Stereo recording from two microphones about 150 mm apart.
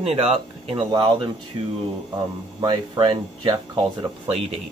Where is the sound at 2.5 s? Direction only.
30° right (ahead or behind).